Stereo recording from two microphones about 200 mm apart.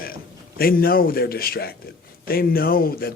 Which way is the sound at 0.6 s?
50° left (ahead or behind).